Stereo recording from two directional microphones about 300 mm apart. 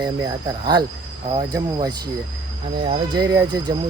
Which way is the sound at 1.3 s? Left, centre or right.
Centre.